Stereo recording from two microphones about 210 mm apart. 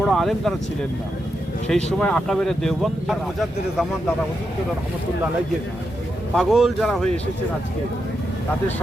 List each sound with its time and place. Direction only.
0.0 s speech: centre (ahead or behind)
1.6 s speech: 5° left (ahead or behind)
6.3 s speech: centre (ahead or behind)